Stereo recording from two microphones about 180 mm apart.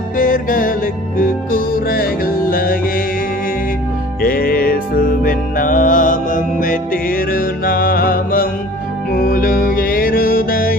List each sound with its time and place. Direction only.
0.2 s music: 50° left (ahead or behind)
4.2 s music: 55° left (ahead or behind)